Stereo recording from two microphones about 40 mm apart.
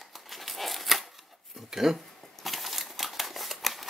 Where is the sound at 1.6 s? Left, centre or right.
Centre.